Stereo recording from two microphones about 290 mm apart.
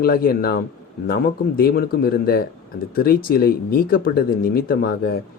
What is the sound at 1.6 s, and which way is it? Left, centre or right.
Speech, left.